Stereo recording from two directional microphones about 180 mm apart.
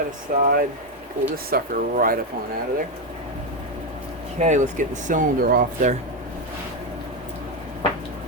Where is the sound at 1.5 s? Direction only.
55° right (ahead or behind).